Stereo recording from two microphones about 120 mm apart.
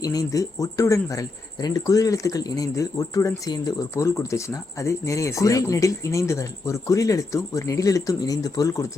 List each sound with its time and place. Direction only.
0.0 s speech: 30° left (ahead or behind)